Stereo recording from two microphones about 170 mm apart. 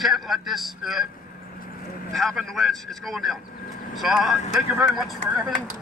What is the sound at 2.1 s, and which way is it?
Speech, centre (ahead or behind).